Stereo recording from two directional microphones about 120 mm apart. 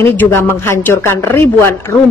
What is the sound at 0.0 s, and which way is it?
Speech, 20° left (ahead or behind).